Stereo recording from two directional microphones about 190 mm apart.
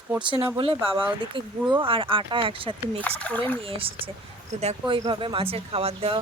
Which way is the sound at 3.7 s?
30° right (ahead or behind).